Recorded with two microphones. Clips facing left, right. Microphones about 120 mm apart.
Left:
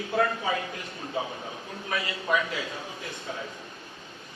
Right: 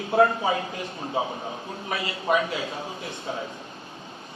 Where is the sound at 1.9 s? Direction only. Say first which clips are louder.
Right 3 dB; 25° right (ahead or behind).